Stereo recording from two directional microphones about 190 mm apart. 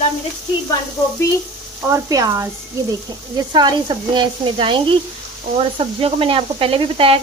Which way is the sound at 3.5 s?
25° right (ahead or behind).